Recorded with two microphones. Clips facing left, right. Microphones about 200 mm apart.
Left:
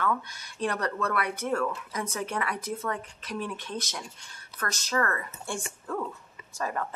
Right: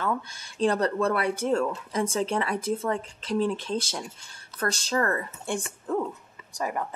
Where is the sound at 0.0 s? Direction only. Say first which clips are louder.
Right 1 dB; 25° right (ahead or behind).